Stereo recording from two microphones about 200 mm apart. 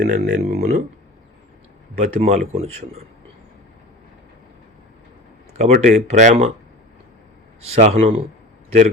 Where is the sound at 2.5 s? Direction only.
30° right (ahead or behind).